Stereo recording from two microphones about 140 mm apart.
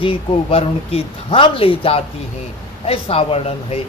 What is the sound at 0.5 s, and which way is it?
Speech, 45° left (ahead or behind).